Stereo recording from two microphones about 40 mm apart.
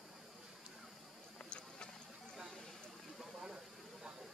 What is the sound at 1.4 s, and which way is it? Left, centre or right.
Vehicle, left.